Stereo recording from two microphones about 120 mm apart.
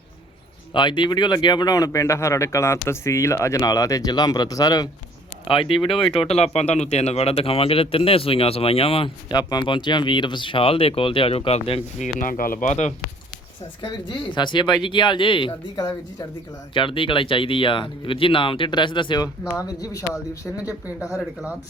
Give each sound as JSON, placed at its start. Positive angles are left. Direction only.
{"t": 0.7, "sound": "speech", "side_deg": 40}
{"t": 5.5, "sound": "speech", "side_deg": 50}
{"t": 9.3, "sound": "speech", "side_deg": 35}
{"t": 11.9, "sound": "speech", "side_deg": 90}
{"t": 13.8, "sound": "speech", "side_deg": 40}